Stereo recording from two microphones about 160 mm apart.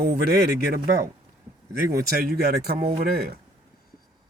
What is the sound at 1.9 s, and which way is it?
A man's voice, 70° right (ahead or behind).